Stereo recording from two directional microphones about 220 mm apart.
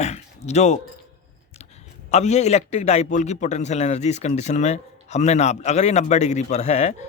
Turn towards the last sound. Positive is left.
turn(degrees=30)  # may be behind; listen again after turning